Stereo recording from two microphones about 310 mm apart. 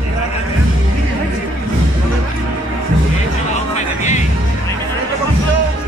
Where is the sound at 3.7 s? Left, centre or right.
Left.